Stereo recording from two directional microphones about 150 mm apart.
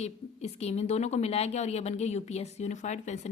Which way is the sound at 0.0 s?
45° left (ahead or behind).